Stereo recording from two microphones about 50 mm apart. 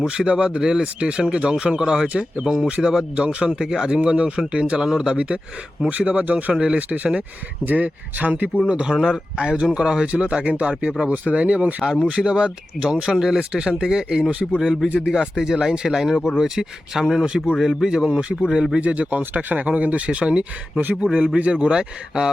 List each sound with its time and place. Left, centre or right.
0.0 s speech: centre
2.8 s speech: centre
3.2 s speech: centre
6.1 s speech: right
6.5 s speech: centre
8.7 s speech: centre
13.5 s speech: centre
17.2 s speech: centre
18.2 s speech: right